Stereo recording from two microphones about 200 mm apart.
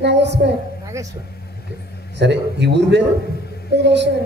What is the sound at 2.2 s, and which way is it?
A man's voice, 60° right (ahead or behind).